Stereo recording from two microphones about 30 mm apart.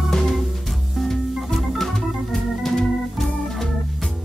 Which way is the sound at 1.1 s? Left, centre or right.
Centre.